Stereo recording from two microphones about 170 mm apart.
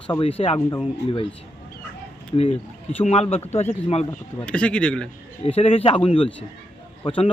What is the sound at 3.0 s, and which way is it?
Speech, 40° left (ahead or behind).